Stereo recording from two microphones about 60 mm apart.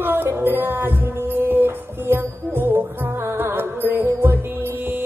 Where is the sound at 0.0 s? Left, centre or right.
Right.